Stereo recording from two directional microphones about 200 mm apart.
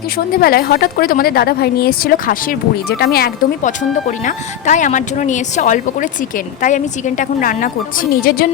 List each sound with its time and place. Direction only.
0.3 s a woman's voice: 50° left (ahead or behind)